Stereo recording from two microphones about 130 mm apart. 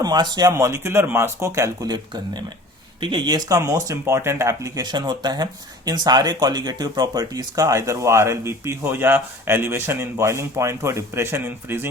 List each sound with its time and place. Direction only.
0.0 s speech: 30° right (ahead or behind); by 11.9 s 15° right (ahead or behind)